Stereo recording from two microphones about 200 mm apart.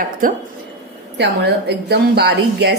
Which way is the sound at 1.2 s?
55° right (ahead or behind).